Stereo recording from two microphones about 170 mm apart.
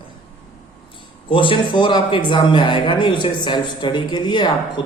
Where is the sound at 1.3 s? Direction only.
30° left (ahead or behind).